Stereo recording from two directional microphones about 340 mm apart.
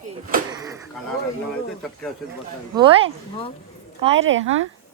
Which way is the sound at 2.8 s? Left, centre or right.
Centre.